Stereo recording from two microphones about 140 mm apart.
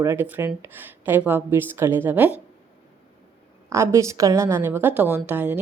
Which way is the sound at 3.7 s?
20° right (ahead or behind).